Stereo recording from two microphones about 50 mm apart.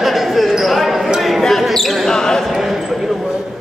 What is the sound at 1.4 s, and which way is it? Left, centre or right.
Basketball bounce, centre.